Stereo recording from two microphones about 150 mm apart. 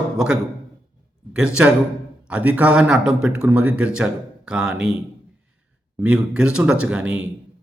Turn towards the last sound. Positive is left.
turn(degrees=-10)  # may be behind; listen again after turning